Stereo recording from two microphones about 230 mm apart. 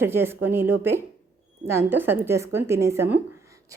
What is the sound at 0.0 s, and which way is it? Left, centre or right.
Speech, centre.